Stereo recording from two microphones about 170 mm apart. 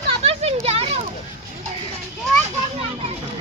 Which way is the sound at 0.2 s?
35° right (ahead or behind).